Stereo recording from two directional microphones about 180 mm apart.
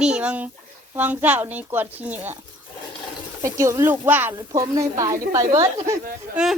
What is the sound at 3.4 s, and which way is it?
A woman's voice, 15° right (ahead or behind).